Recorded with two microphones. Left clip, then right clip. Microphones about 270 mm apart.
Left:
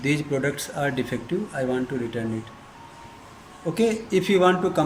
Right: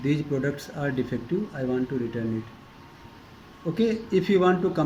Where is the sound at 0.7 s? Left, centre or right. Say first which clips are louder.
Left 3 dB; left.